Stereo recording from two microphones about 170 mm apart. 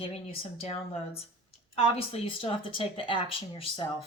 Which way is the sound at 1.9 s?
30° left (ahead or behind).